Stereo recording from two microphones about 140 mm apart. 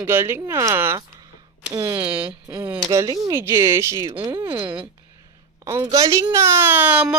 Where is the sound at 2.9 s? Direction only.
25° right (ahead or behind).